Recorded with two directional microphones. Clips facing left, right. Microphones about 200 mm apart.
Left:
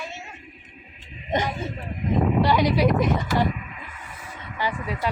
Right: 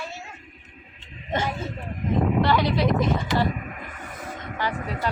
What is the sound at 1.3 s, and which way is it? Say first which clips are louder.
Speech: left 2 dB; 15° left (ahead or behind).